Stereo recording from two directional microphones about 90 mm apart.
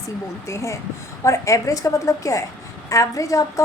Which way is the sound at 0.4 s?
30° left (ahead or behind).